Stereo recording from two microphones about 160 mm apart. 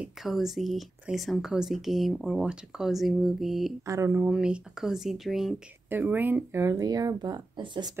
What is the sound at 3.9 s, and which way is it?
Speech, 15° right (ahead or behind).